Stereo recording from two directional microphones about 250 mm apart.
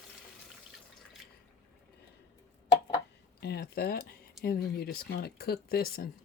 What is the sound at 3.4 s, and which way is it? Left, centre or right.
Speech, left.